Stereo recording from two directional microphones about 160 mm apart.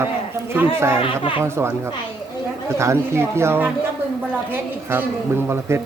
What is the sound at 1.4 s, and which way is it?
A man's voice, 15° right (ahead or behind).